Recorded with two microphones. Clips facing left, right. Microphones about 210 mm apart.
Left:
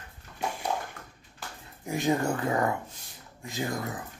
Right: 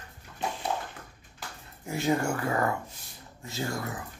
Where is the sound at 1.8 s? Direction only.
15° left (ahead or behind).